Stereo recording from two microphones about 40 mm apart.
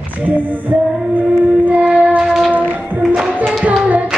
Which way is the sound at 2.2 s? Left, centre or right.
Centre.